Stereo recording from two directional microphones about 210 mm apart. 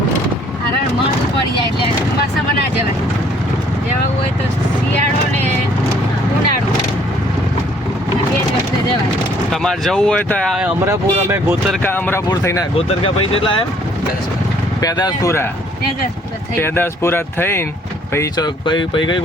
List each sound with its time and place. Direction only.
9.5 s speech: centre (ahead or behind)
10.8 s speech: 10° right (ahead or behind)
11.7 s speech: 10° left (ahead or behind)
12.7 s speech: 30° left (ahead or behind)
14.8 s speech: 20° left (ahead or behind)
16.6 s speech: 10° left (ahead or behind)